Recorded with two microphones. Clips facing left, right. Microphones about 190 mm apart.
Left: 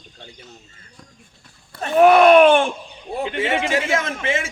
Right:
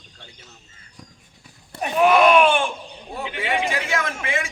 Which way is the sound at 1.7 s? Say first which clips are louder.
Left 1 dB; 15° right (ahead or behind).